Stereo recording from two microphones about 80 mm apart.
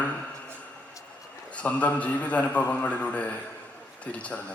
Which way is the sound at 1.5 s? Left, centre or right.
Centre.